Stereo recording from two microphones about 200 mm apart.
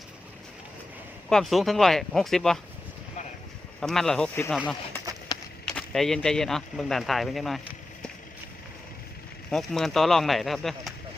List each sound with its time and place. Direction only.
1.3 s speech: centre (ahead or behind)
3.8 s speech: centre (ahead or behind)
5.3 s run: 20° left (ahead or behind)
5.6 s speech: 5° left (ahead or behind)
9.5 s speech: centre (ahead or behind)